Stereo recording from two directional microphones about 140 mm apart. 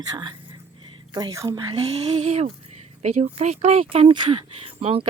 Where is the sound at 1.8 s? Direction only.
45° right (ahead or behind).